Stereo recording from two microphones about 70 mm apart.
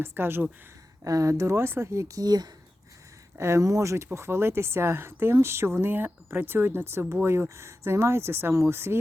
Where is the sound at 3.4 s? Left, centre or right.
Right.